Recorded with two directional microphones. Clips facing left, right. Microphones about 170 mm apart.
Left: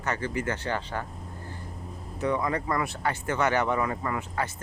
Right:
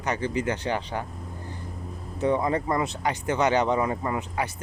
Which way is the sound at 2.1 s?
25° right (ahead or behind).